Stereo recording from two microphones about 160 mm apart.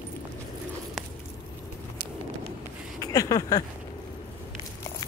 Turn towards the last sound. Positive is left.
turn(degrees=20)  # may be behind; listen again after turning